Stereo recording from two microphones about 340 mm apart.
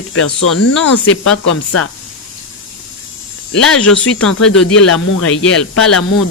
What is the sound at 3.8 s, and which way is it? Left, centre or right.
Speech, left.